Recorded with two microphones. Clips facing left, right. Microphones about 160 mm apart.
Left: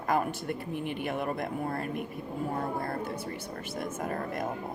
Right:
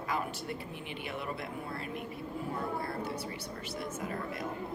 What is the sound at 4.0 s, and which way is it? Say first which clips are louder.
Speech: left 4 dB; 50° left (ahead or behind).